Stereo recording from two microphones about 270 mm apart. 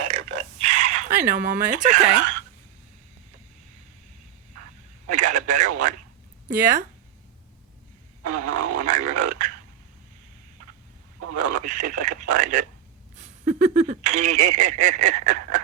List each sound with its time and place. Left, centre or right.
0.3 s a sound: right
5.0 s radio: right
6.5 s speech: right
8.2 s speech: right
11.3 s speech: right